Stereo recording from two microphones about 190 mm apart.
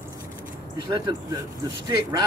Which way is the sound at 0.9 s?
25° right (ahead or behind).